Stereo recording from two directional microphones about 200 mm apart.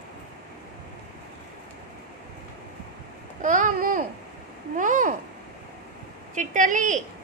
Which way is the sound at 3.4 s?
40° right (ahead or behind).